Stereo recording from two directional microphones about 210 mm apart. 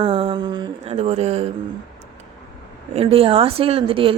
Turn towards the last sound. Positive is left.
turn(degrees=-25)  # may be behind; listen again after turning